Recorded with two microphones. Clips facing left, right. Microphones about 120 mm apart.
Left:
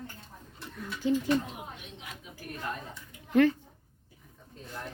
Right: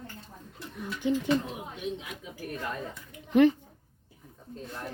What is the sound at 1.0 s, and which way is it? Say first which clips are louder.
Bird: even; 20° right (ahead or behind).